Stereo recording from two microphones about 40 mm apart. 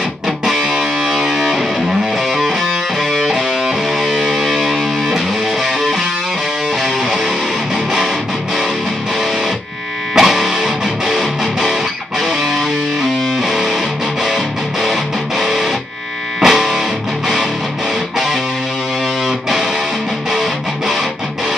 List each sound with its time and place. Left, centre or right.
0.5 s music: centre
10.1 s music: centre